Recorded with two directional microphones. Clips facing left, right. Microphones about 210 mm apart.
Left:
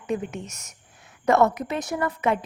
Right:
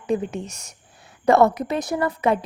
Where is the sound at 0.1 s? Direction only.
35° right (ahead or behind).